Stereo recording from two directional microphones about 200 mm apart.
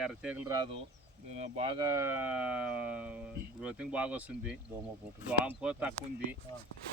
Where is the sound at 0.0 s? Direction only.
5° right (ahead or behind).